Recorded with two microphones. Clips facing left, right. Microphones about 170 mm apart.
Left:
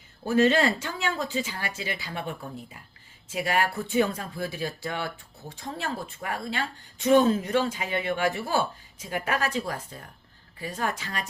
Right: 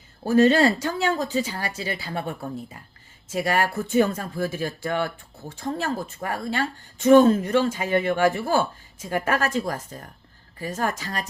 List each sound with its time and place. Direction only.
0.3 s a woman's voice: 35° right (ahead or behind)